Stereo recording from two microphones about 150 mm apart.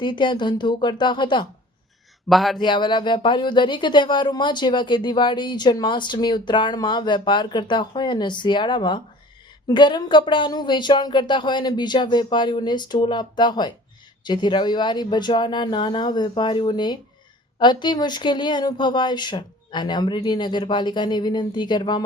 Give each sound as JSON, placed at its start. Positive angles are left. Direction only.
{"t": 0.0, "sound": "speech", "side_deg": 30}
{"t": 2.3, "sound": "speech", "side_deg": 0}
{"t": 2.6, "sound": "speech", "side_deg": 30}